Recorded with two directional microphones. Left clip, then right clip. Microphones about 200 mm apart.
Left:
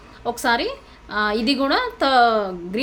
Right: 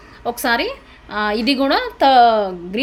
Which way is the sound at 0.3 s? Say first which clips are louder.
Right 2 dB; 15° right (ahead or behind).